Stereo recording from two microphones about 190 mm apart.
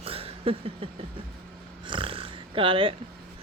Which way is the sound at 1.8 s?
25° right (ahead or behind).